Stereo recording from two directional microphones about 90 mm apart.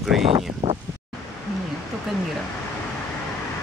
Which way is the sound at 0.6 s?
75° right (ahead or behind).